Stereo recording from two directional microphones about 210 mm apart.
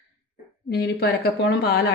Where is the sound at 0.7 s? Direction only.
50° left (ahead or behind).